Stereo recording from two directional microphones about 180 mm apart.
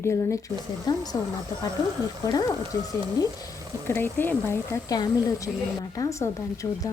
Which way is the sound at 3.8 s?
15° left (ahead or behind).